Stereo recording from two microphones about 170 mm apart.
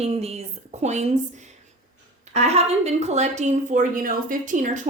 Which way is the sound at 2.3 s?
40° right (ahead or behind).